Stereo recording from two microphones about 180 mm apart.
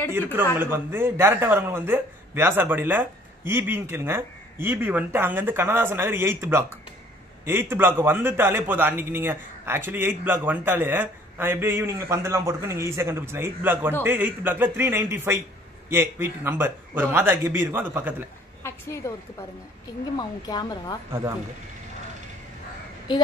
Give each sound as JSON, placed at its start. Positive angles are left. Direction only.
{"t": 0.1, "sound": "a man's voice", "side_deg": -10}
{"t": 7.7, "sound": "a man's voice", "side_deg": -10}
{"t": 18.6, "sound": "a woman's voice", "side_deg": 15}
{"t": 20.2, "sound": "a woman's voice", "side_deg": 20}